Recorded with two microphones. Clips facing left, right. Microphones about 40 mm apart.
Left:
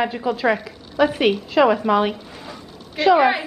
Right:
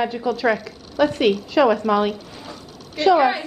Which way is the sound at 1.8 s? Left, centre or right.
Left.